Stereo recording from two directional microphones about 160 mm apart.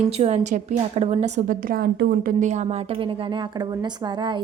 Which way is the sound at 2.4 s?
45° right (ahead or behind).